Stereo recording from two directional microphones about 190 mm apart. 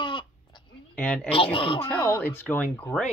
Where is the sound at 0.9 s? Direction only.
5° left (ahead or behind).